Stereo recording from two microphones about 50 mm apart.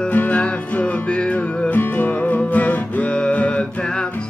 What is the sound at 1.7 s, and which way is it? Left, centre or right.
Music, left.